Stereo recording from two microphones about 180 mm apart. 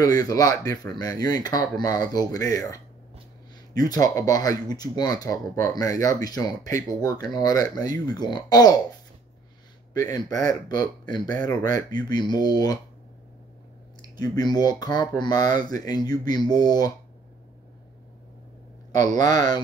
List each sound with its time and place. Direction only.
0.2 s speech: 20° left (ahead or behind)
9.9 s speech: 20° left (ahead or behind)
14.1 s speech: 20° left (ahead or behind)
18.9 s speech: 20° left (ahead or behind)